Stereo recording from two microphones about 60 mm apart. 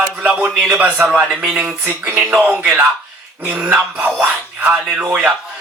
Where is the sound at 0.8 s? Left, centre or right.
Right.